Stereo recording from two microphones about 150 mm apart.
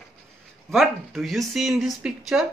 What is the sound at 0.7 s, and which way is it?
Speech, centre (ahead or behind).